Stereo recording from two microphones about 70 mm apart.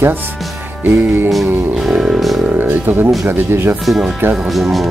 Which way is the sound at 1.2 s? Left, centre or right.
Centre.